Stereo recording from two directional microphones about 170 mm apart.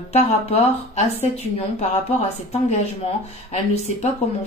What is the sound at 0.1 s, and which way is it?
A woman's voice, 40° left (ahead or behind).